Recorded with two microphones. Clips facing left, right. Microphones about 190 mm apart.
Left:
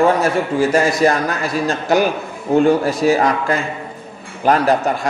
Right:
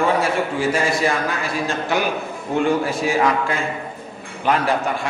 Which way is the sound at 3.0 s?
40° left (ahead or behind).